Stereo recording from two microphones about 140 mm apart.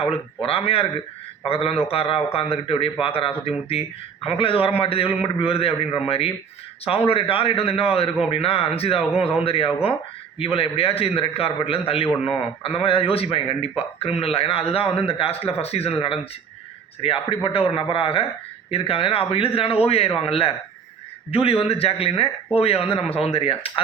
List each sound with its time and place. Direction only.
0.4 s a man's voice: 45° left (ahead or behind)